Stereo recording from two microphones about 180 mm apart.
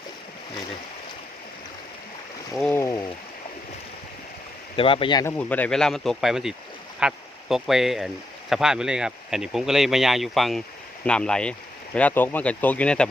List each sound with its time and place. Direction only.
2.6 s speech: 10° left (ahead or behind)
4.8 s speech: 30° left (ahead or behind)
5.2 s speech: 10° left (ahead or behind)